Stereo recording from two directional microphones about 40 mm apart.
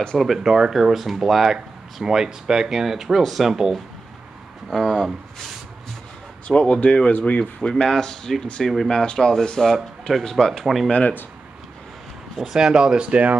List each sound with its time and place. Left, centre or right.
0.2 s speech: centre
4.6 s speech: centre
6.4 s speech: left
7.1 s speech: left
7.7 s speech: centre
10.6 s speech: centre
10.9 s speech: left
12.4 s speech: centre; by 13.4 s right